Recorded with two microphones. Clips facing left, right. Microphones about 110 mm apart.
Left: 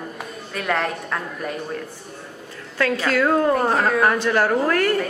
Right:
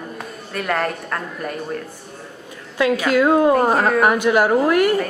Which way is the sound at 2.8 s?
15° right (ahead or behind).